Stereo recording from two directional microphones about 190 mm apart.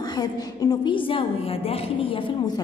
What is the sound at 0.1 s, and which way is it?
A woman's voice, 20° left (ahead or behind).